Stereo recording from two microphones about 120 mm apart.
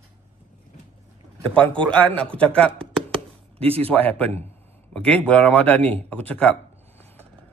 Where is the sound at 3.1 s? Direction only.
55° right (ahead or behind).